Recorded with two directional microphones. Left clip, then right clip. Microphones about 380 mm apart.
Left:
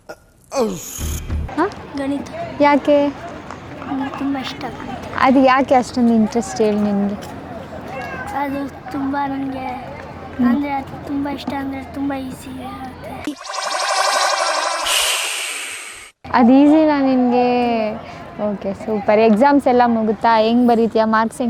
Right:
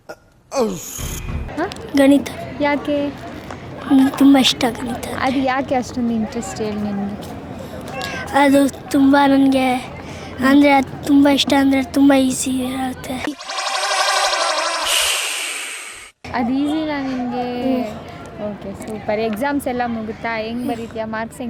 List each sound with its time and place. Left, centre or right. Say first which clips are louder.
0.5 s a sound: even; centre
1.9 s a woman's voice: right 14 dB; right
2.6 s a woman's voice: left 6 dB; centre
4.2 s a woman's voice: right 11 dB; right
5.1 s a woman's voice: left 7 dB; centre
8.0 s a woman's voice: right 8 dB; right
13.2 s music: even; centre
16.3 s a woman's voice: left 9 dB; left
19.0 s a woman's voice: left 8 dB; left